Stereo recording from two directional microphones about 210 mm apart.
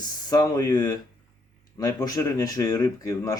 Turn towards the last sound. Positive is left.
turn(degrees=15)  # may be behind; listen again after turning